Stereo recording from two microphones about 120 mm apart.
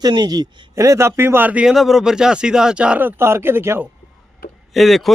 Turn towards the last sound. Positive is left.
turn(degrees=0)  # may be behind; listen again after turning